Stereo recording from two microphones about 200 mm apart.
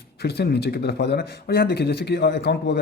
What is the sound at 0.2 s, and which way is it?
Speech, 55° left (ahead or behind).